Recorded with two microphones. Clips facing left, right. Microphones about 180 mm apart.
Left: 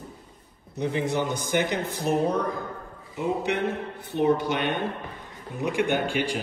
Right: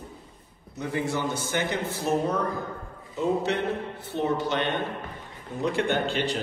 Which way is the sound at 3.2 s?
15° left (ahead or behind).